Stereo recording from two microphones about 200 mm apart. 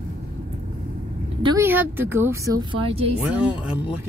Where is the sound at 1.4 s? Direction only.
15° right (ahead or behind).